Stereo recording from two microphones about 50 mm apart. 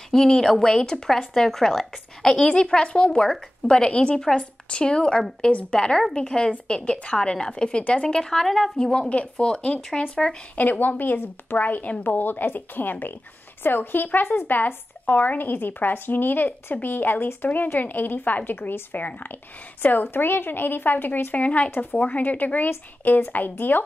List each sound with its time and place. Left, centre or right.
0.1 s speech: centre
2.4 s speech: centre
8.7 s speech: centre
10.0 s speech: left
10.6 s a woman's voice: left